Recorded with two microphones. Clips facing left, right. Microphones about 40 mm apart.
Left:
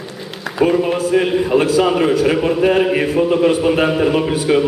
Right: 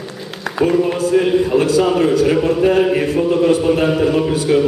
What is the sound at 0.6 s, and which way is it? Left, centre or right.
A man's voice, centre.